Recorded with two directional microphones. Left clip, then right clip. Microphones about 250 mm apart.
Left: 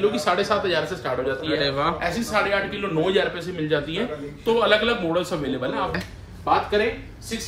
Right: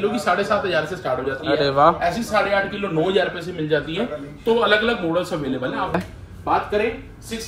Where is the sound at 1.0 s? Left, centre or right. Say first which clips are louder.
Right 2 dB; centre.